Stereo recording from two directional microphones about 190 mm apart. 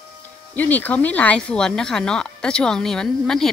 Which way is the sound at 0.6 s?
10° left (ahead or behind).